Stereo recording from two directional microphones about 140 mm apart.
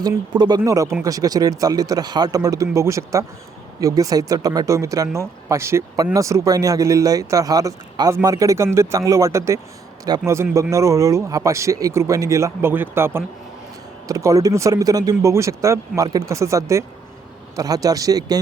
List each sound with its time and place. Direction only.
0.3 s speech: 30° right (ahead or behind)